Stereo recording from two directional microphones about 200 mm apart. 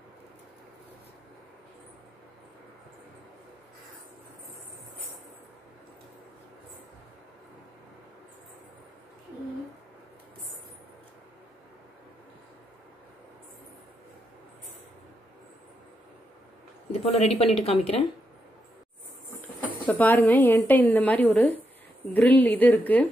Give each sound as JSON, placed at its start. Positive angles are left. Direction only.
{"t": 17.0, "sound": "speech", "side_deg": 30}
{"t": 19.9, "sound": "a woman's voice", "side_deg": 10}